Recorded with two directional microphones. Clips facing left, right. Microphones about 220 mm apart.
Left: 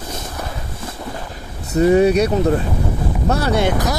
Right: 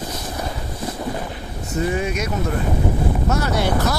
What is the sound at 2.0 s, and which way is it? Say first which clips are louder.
Speech: left 10 dB; 35° left (ahead or behind).